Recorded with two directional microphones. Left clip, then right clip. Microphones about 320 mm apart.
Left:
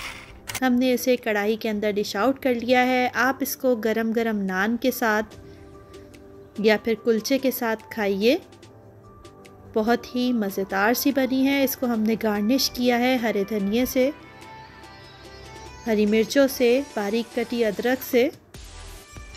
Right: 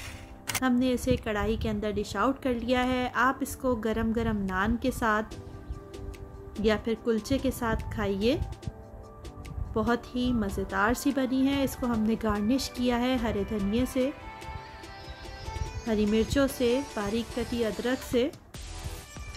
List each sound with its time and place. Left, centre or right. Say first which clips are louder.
0.5 s speech: left 5 dB; centre
6.5 s speech: left 7 dB; centre
9.8 s a woman's voice: left 6 dB; centre
15.6 s speech: left 7 dB; centre